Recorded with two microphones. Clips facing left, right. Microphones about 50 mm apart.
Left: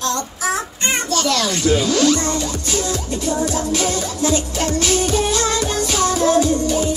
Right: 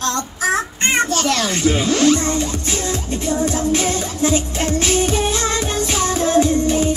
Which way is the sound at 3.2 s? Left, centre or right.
Right.